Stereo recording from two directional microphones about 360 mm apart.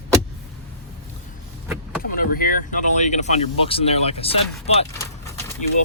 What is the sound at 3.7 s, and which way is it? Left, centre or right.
Speech, centre.